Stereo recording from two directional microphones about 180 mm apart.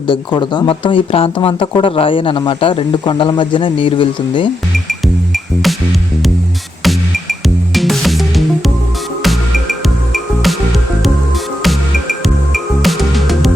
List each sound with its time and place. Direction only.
0.3 s speech: 25° left (ahead or behind)
4.9 s music: centre (ahead or behind)
6.8 s music: centre (ahead or behind)
11.6 s music: centre (ahead or behind)